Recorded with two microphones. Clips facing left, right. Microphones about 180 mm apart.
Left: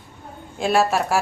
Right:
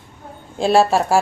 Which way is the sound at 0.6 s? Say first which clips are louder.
Right 4 dB; 30° right (ahead or behind).